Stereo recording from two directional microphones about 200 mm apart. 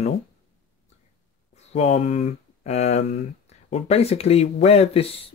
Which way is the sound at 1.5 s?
35° left (ahead or behind).